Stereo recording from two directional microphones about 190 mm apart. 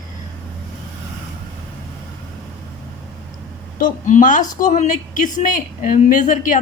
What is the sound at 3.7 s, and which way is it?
Speech, 45° left (ahead or behind).